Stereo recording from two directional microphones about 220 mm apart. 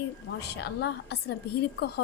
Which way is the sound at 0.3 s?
50° left (ahead or behind).